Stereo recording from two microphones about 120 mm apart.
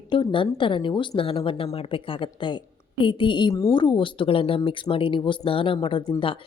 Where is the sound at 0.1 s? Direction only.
45° left (ahead or behind).